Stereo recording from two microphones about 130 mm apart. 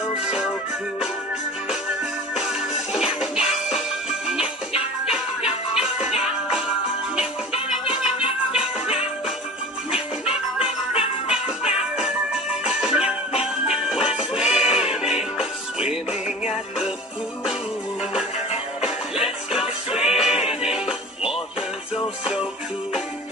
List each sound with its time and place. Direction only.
0.2 s music: 5° right (ahead or behind)
2.3 s music: 5° right (ahead or behind)
5.1 s music: 5° right (ahead or behind)
7.8 s music: 45° left (ahead or behind)
8.5 s music: 5° right (ahead or behind)
9.9 s music: 50° left (ahead or behind)
12.0 s music: 5° right (ahead or behind)
18.8 s music: 5° right (ahead or behind)